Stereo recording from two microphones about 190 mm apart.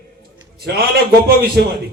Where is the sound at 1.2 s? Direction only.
55° right (ahead or behind).